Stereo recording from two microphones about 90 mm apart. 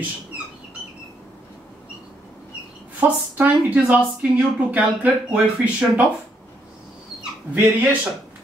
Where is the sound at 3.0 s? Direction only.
15° right (ahead or behind).